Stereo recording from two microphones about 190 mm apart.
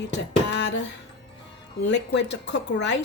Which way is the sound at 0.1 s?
65° left (ahead or behind).